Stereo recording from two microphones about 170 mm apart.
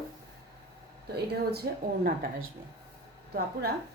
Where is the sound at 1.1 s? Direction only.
70° right (ahead or behind).